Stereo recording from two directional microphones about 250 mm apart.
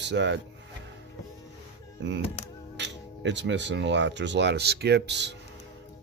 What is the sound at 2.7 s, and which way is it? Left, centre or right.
Speech, right.